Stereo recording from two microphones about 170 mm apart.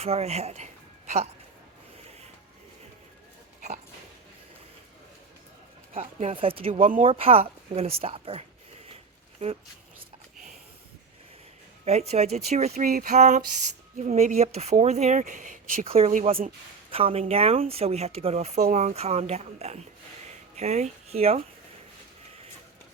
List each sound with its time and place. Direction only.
0.0 s speech: 40° right (ahead or behind)
5.9 s speech: 40° right (ahead or behind)
6.8 s speech: 50° right (ahead or behind)
7.1 s speech: 35° right (ahead or behind)
11.9 s speech: 40° right (ahead or behind)
15.9 s speech: 35° right (ahead or behind)